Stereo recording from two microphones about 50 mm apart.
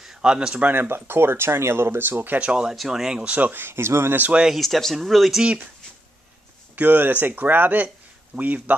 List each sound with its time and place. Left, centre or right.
0.0 s speech: centre
0.6 s speech: right
2.4 s speech: centre
3.3 s speech: right
3.6 s speech: right
4.5 s speech: centre
6.7 s speech: right